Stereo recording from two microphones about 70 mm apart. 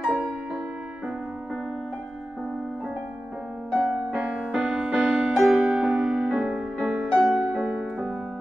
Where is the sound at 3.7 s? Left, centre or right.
Centre.